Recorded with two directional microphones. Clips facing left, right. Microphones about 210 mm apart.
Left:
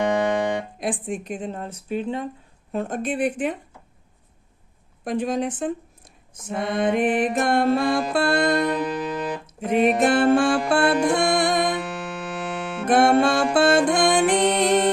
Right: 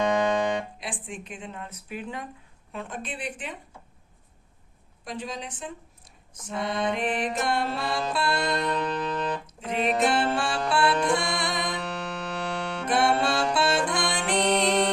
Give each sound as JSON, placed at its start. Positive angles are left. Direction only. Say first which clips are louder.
{"t": 0.0, "sound": "music", "louder": "left 2 dB", "side_deg": 20}
{"t": 0.8, "sound": "speech", "louder": "left 10 dB", "side_deg": 45}
{"t": 2.7, "sound": "music", "louder": "left 11 dB", "side_deg": 45}
{"t": 5.0, "sound": "music", "louder": "left 11 dB", "side_deg": 55}
{"t": 8.7, "sound": "music", "louder": "left 3 dB", "side_deg": 10}
{"t": 10.0, "sound": "music", "louder": "left 7 dB", "side_deg": 50}
{"t": 11.9, "sound": "music", "louder": "left 2 dB", "side_deg": 5}
{"t": 12.9, "sound": "music", "louder": "left 7 dB", "side_deg": 50}